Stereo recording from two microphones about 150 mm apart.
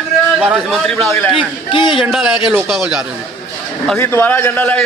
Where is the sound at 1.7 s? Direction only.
35° left (ahead or behind).